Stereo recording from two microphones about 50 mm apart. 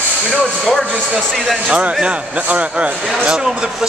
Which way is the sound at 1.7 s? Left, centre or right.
Right.